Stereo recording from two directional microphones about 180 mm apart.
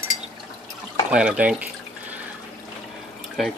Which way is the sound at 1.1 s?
5° right (ahead or behind).